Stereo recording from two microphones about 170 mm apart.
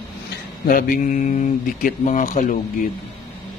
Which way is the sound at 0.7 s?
55° left (ahead or behind).